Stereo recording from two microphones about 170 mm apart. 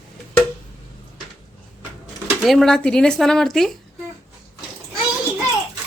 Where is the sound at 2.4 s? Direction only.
Centre (ahead or behind).